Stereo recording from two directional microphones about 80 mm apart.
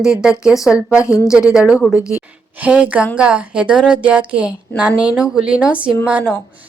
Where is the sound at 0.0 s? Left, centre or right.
Centre.